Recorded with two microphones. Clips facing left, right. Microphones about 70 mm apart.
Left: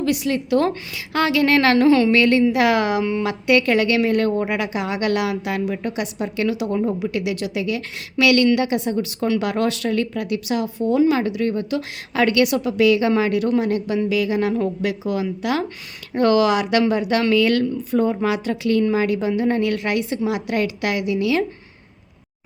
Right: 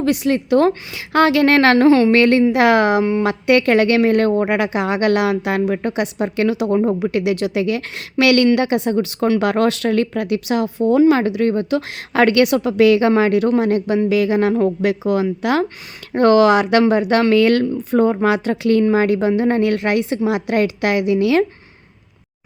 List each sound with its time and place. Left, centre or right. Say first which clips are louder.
0.0 s speech: right 4 dB; right
2.1 s speech: right 3 dB; right
3.0 s a woman's voice: right 4 dB; right
3.2 s speech: right 1 dB; right